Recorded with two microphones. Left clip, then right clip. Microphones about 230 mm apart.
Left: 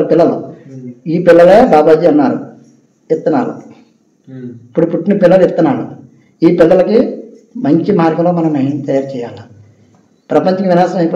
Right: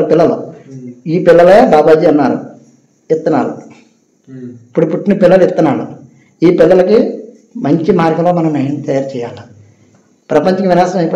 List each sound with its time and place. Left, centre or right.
0.1 s a man's voice: right